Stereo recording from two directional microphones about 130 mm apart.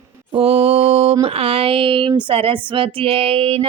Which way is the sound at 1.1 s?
45° right (ahead or behind).